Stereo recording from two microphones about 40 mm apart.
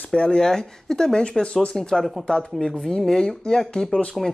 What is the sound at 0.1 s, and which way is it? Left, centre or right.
Speech, left.